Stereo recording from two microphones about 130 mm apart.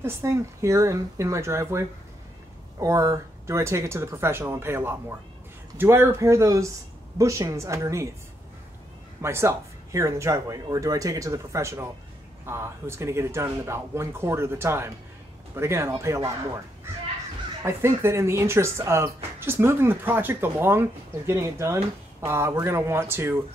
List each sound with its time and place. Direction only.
0.0 s speech: 20° right (ahead or behind)
9.2 s speech: 20° right (ahead or behind)
17.6 s speech: 20° right (ahead or behind)